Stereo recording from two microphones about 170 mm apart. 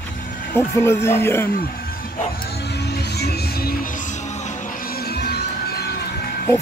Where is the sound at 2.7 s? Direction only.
75° left (ahead or behind).